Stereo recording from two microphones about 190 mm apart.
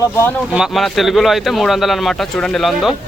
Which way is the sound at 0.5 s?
Centre (ahead or behind).